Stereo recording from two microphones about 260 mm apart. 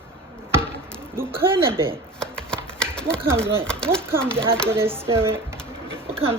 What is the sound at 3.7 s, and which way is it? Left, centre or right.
Speech, centre.